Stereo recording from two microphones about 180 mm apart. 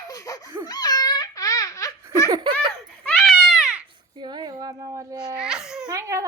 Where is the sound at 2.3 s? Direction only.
20° right (ahead or behind).